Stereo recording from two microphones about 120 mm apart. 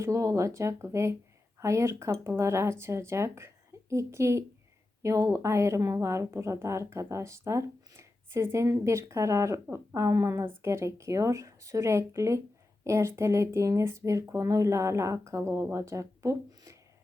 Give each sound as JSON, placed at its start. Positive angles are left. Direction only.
{"t": 0.0, "sound": "a woman's voice", "side_deg": -25}